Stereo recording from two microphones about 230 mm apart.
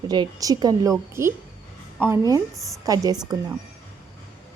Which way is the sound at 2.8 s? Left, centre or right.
Centre.